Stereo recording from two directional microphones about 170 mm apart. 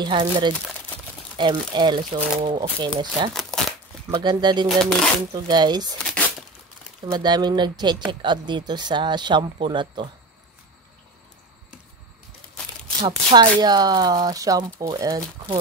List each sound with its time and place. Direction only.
0.0 s speech: 25° right (ahead or behind)
4.6 s speech: centre (ahead or behind)
5.3 s speech: 25° right (ahead or behind)
7.1 s speech: 25° right (ahead or behind)
13.3 s speech: 25° right (ahead or behind)